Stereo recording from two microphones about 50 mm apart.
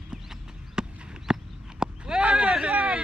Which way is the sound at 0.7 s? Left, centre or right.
Centre.